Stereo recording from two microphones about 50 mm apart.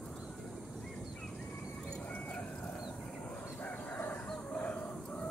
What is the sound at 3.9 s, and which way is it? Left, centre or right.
Chicken, left.